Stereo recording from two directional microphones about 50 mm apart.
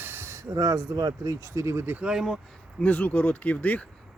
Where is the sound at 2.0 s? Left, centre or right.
Centre.